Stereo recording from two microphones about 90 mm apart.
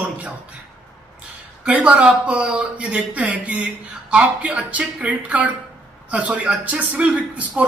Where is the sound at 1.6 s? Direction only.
15° right (ahead or behind).